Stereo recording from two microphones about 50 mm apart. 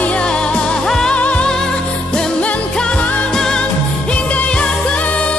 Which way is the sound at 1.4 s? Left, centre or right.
Centre.